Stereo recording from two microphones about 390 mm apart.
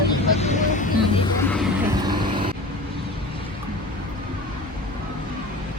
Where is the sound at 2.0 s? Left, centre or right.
Centre.